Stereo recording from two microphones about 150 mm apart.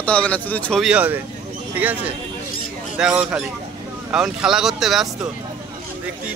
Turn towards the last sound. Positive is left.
turn(degrees=0)  # may be behind; listen again after turning